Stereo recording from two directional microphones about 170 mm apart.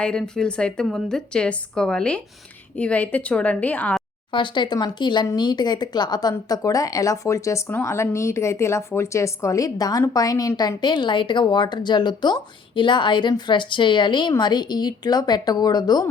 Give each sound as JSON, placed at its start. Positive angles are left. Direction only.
{"t": 0.0, "sound": "a woman's voice", "side_deg": 5}
{"t": 4.3, "sound": "speech", "side_deg": 30}